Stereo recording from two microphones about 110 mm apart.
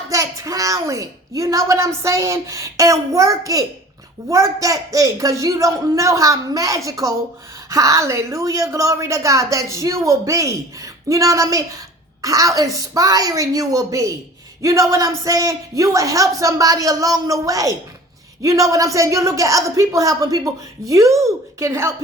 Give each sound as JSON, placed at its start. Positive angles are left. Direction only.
{"t": 0.1, "sound": "a woman's voice", "side_deg": -30}